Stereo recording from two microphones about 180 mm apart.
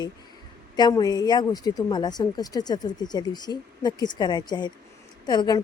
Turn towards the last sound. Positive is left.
turn(degrees=25)  # may be behind; listen again after turning